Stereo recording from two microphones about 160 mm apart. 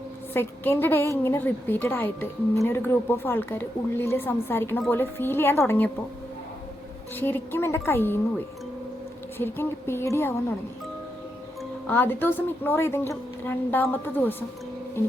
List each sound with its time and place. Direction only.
0.3 s a woman's voice: 15° left (ahead or behind)
7.2 s a woman's voice: 15° left (ahead or behind)
9.4 s a woman's voice: 15° left (ahead or behind)
11.9 s a woman's voice: 10° left (ahead or behind)